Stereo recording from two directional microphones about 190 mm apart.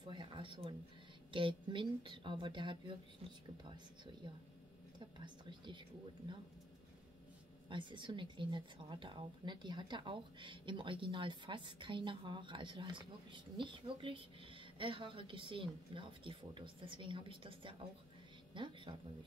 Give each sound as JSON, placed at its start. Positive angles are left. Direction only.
{"t": 0.0, "sound": "a sound", "side_deg": -25}
{"t": 1.3, "sound": "a woman's voice", "side_deg": -25}
{"t": 5.2, "sound": "a woman's voice", "side_deg": -25}
{"t": 7.7, "sound": "a woman's voice", "side_deg": -25}